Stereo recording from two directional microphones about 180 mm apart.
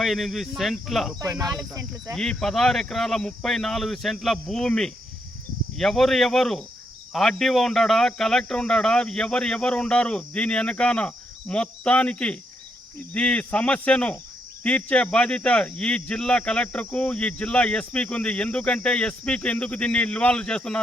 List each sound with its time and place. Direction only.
0.0 s speech: centre (ahead or behind)
1.2 s speech: 20° right (ahead or behind)
2.1 s speech: 5° left (ahead or behind)